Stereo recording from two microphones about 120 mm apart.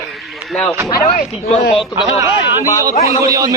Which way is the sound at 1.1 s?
90° left.